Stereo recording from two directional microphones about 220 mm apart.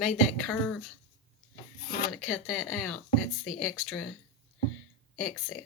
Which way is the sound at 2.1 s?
Centre (ahead or behind).